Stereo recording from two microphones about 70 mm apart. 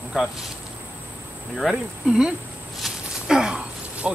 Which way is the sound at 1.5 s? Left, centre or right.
Centre.